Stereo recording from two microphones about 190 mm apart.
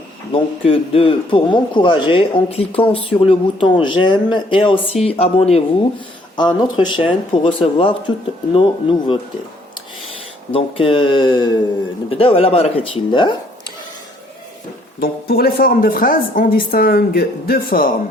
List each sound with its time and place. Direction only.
0.6 s speech: 30° left (ahead or behind)
10.5 s speech: 30° left (ahead or behind)
15.0 s a woman's voice: 55° left (ahead or behind)